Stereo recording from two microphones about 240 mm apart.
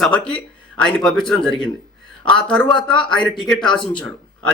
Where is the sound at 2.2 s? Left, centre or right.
Centre.